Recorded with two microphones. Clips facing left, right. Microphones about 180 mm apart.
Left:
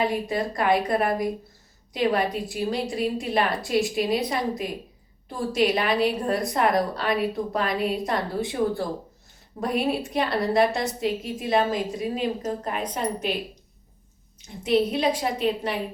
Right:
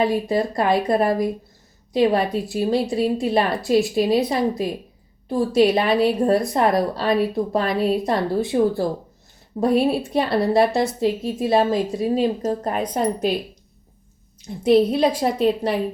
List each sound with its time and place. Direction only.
0.3 s a woman's voice: 30° right (ahead or behind)
14.6 s a woman's voice: 35° right (ahead or behind)